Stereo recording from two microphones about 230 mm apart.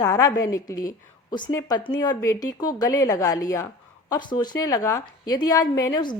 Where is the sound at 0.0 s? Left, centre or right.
Centre.